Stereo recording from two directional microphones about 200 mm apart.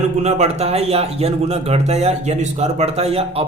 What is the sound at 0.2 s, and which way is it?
Speech, 35° right (ahead or behind).